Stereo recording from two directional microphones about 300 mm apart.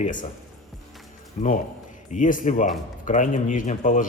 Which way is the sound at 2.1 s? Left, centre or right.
Left.